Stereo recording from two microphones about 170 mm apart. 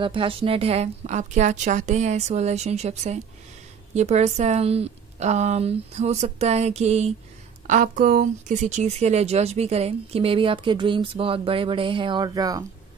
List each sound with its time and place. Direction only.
0.0 s speech: 30° right (ahead or behind)
7.6 s speech: 50° right (ahead or behind); by 12.6 s 20° right (ahead or behind)